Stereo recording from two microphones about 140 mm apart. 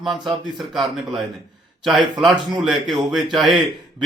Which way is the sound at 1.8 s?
Centre (ahead or behind).